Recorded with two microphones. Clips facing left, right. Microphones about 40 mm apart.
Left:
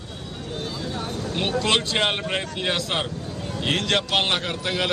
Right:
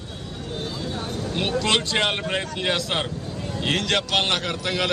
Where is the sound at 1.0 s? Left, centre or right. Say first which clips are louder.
Even; left.